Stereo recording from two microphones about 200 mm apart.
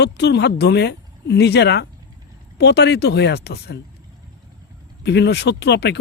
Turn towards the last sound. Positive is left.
turn(degrees=55)  # may be behind; listen again after turning